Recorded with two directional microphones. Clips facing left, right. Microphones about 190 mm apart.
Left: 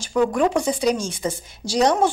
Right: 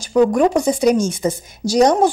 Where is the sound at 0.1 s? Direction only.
40° right (ahead or behind).